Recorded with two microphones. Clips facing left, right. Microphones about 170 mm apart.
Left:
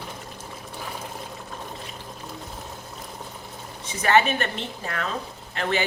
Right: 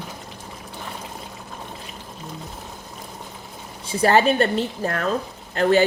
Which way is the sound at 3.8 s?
35° right (ahead or behind).